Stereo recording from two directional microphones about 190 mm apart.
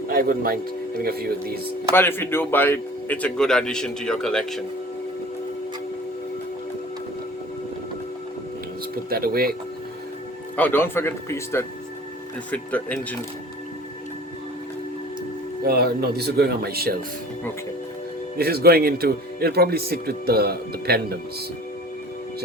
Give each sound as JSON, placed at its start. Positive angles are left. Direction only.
{"t": 0.1, "sound": "speech", "side_deg": -50}
{"t": 1.9, "sound": "a man's voice", "side_deg": 10}
{"t": 9.0, "sound": "speech", "side_deg": -55}
{"t": 10.6, "sound": "speech", "side_deg": 10}
{"t": 15.6, "sound": "speech", "side_deg": -55}
{"t": 18.3, "sound": "speech", "side_deg": -55}